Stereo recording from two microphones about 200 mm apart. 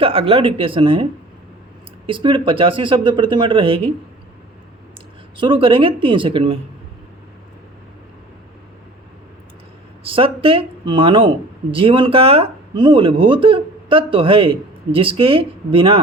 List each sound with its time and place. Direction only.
0.0 s speech: 25° right (ahead or behind)
2.0 s speech: 25° right (ahead or behind)
5.4 s speech: 25° right (ahead or behind)
10.0 s speech: 25° right (ahead or behind)